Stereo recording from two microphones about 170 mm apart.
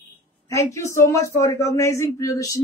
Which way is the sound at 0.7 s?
15° left (ahead or behind).